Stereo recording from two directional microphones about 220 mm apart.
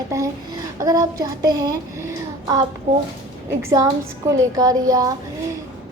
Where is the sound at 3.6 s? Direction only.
15° right (ahead or behind).